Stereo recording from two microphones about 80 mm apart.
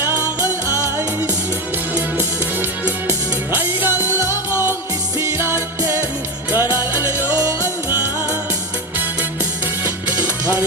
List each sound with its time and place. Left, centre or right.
0.7 s music: right
2.1 s music: right
5.8 s music: right
6.5 s music: right
7.3 s music: right
7.6 s music: right